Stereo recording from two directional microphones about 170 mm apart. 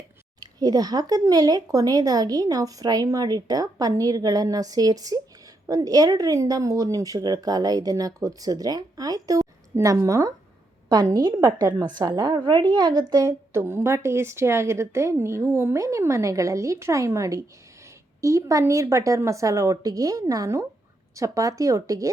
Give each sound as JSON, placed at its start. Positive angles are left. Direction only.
{"t": 0.6, "sound": "a woman's voice", "side_deg": -20}